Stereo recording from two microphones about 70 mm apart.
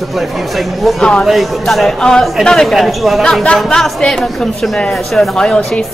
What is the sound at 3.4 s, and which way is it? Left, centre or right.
Speech, centre.